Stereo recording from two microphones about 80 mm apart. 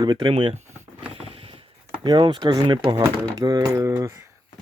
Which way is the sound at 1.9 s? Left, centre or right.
Right.